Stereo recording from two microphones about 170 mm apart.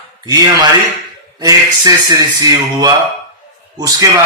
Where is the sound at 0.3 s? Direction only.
20° right (ahead or behind).